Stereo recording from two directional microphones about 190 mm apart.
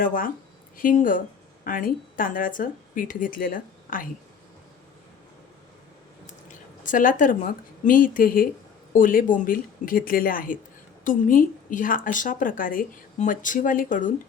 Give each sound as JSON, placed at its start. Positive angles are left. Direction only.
{"t": 0.0, "sound": "a woman's voice", "side_deg": 45}
{"t": 6.5, "sound": "a woman's voice", "side_deg": 45}